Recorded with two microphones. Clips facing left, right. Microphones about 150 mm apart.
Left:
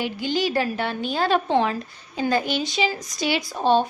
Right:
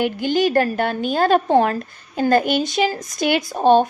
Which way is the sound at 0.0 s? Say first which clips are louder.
Right 6 dB; 50° right (ahead or behind).